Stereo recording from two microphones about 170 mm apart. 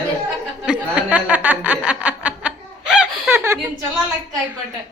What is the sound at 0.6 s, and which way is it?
Chuckle, 5° right (ahead or behind).